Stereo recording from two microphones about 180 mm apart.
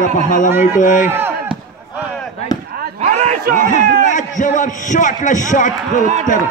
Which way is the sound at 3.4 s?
50° right (ahead or behind).